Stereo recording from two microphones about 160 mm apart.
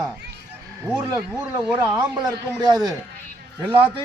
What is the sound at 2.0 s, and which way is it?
Speech, 25° right (ahead or behind).